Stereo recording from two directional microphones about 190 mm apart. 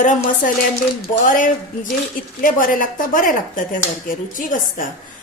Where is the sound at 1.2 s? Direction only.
45° left (ahead or behind).